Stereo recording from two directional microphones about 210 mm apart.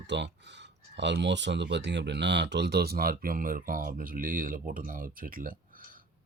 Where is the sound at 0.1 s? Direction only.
55° right (ahead or behind).